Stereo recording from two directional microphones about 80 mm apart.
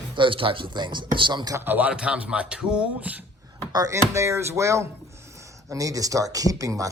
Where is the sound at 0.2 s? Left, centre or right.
Right.